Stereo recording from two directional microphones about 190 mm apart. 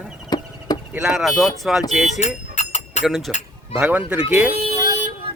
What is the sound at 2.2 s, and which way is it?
Livestock, 35° left (ahead or behind).